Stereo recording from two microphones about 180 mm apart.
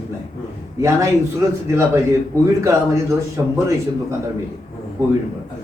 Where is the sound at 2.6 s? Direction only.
15° right (ahead or behind).